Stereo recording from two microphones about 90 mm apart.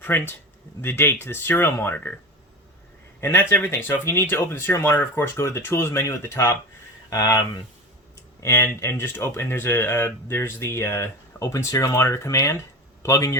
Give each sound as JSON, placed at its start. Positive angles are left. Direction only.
{"t": 0.0, "sound": "speech", "side_deg": 25}
{"t": 3.2, "sound": "speech", "side_deg": 30}
{"t": 8.4, "sound": "speech", "side_deg": 30}